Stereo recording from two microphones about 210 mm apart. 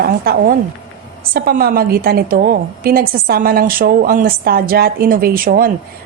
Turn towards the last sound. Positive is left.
turn(degrees=-45)  # may be behind; listen again after turning